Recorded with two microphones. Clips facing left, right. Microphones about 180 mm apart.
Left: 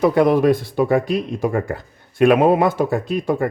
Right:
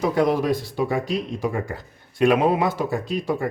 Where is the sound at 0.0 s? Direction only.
60° left (ahead or behind).